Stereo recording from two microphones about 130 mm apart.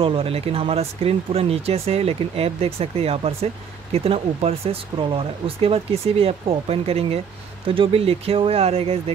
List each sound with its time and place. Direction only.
0.0 s speech: 50° right (ahead or behind)